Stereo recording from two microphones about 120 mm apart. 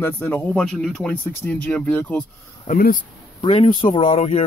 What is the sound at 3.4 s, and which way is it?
Speech, 50° left (ahead or behind).